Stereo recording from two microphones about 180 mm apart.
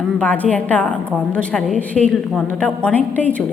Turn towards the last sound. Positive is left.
turn(degrees=10)  # may be behind; listen again after turning